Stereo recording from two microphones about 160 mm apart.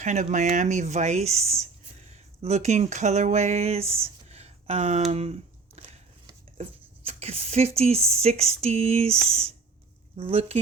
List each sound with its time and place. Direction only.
0.0 s speech: 50° right (ahead or behind)